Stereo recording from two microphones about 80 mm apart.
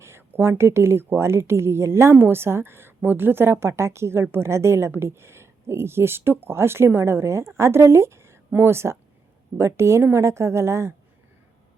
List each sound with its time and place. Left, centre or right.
0.0 s speech: right